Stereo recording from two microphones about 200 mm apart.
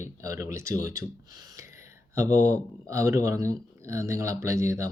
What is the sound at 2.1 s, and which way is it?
Speech, 15° right (ahead or behind).